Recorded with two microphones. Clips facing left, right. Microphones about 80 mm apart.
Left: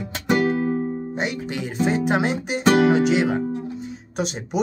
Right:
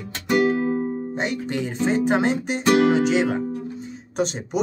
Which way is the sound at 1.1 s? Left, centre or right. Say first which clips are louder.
Right 1 dB; centre.